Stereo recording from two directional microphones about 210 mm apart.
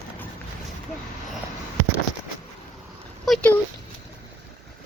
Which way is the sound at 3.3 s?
5° left (ahead or behind).